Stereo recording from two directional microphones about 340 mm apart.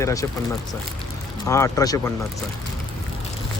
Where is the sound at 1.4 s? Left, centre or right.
Centre.